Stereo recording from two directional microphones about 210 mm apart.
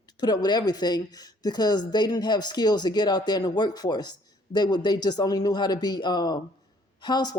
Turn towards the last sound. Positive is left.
turn(degrees=20)  # may be behind; listen again after turning